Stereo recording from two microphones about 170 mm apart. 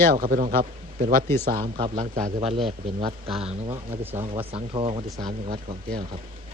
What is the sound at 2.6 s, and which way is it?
Speech, 30° right (ahead or behind).